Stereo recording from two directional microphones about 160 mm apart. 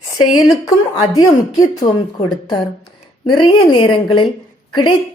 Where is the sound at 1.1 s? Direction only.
25° left (ahead or behind).